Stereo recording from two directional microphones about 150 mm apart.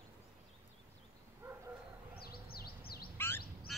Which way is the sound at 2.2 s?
90° left.